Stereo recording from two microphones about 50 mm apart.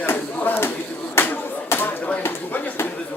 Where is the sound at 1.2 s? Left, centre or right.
Left.